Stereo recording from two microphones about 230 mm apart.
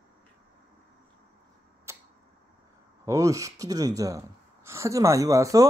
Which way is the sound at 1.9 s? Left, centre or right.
Centre.